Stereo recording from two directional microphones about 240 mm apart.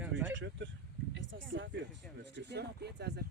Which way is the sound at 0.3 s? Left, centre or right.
Right.